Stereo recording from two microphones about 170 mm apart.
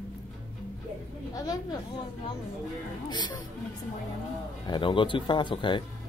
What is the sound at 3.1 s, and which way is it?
Speech, 25° left (ahead or behind).